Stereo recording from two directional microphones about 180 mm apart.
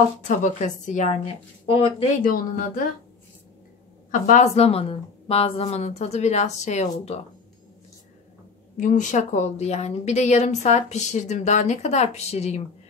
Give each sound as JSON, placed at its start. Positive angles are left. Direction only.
{"t": 0.3, "sound": "a woman's voice", "side_deg": 40}
{"t": 2.0, "sound": "speech", "side_deg": 45}
{"t": 4.1, "sound": "a woman's voice", "side_deg": 45}
{"t": 8.7, "sound": "a woman's voice", "side_deg": 45}